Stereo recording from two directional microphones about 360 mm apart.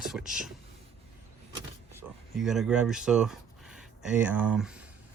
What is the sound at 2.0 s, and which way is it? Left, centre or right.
Speech, centre.